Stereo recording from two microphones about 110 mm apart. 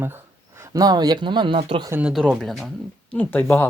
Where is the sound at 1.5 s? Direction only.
55° right (ahead or behind).